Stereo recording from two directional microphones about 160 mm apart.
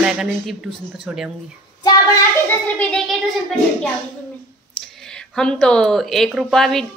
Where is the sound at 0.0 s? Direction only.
5° right (ahead or behind).